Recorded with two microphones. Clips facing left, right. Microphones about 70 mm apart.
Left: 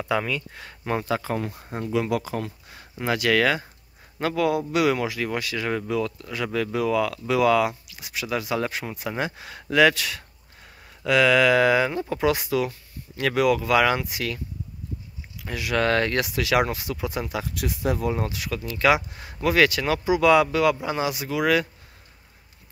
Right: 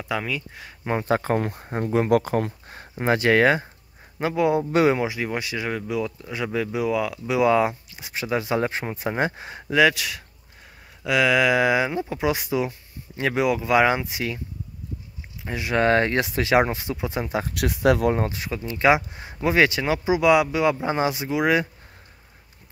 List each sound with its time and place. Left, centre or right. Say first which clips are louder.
0.0 s speech: left 2 dB; centre
1.0 s speech: right 4 dB; right; by 5.7 s centre
5.7 s speech: left 2 dB; centre; by 9.7 s right
9.7 s speech: even; centre
15.4 s speech: right 2 dB; right
17.6 s speech: right 7 dB; right
18.1 s speech: right 2 dB; right
20.8 s speech: right 3 dB; right